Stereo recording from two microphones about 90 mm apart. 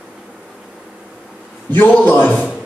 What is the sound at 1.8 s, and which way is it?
Speech, 20° left (ahead or behind).